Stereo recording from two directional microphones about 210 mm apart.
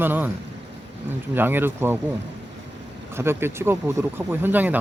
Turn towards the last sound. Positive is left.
turn(degrees=-10)  # may be behind; listen again after turning